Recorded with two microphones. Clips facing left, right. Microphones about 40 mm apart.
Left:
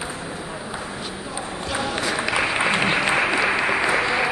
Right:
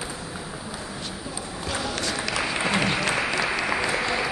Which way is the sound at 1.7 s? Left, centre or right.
Centre.